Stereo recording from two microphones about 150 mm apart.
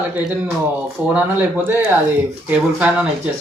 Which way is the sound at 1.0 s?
10° right (ahead or behind).